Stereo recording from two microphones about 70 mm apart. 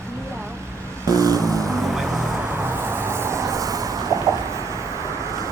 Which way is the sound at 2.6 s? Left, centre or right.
Right.